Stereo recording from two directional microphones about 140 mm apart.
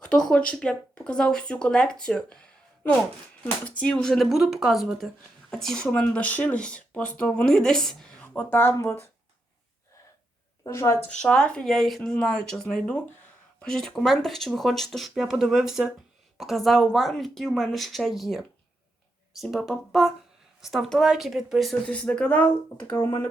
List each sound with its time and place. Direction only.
0.0 s speech: 5° left (ahead or behind)
3.4 s speech: 10° left (ahead or behind)
10.6 s a woman's voice: 20° left (ahead or behind)
11.2 s speech: 5° left (ahead or behind)